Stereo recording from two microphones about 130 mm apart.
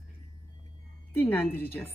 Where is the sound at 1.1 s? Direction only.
15° left (ahead or behind).